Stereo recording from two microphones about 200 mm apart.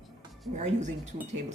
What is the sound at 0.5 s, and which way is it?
Speech, 35° right (ahead or behind).